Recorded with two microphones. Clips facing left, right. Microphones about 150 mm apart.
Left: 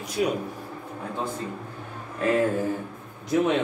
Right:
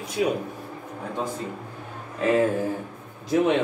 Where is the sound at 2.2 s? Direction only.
25° right (ahead or behind).